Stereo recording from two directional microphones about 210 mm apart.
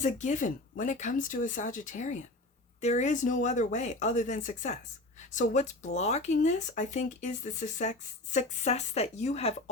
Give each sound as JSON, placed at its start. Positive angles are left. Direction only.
{"t": 0.0, "sound": "speech", "side_deg": 35}